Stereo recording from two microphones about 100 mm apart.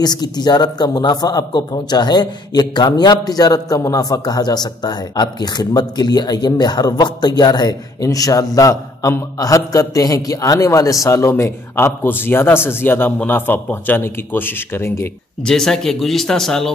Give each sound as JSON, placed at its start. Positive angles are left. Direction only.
{"t": 0.0, "sound": "a man's voice", "side_deg": 45}
{"t": 15.4, "sound": "speech", "side_deg": 5}